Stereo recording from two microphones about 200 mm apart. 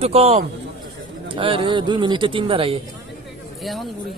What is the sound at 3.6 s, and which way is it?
Speech, centre (ahead or behind).